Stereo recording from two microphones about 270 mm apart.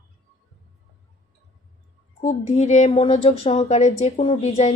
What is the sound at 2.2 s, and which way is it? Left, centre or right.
A woman's voice, left.